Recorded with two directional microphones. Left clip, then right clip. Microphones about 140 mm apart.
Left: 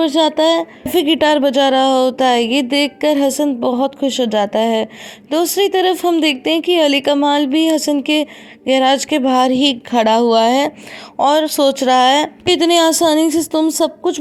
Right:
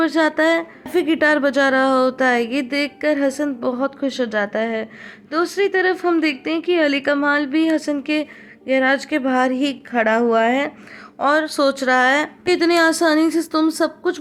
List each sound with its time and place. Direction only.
0.0 s speech: 30° left (ahead or behind)